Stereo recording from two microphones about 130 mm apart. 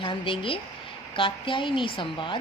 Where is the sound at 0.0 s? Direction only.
40° left (ahead or behind).